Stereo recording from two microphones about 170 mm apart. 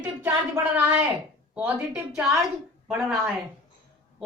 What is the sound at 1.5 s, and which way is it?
Speech, 5° right (ahead or behind).